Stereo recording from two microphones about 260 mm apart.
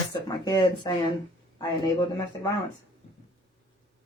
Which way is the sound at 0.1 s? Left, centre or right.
Centre.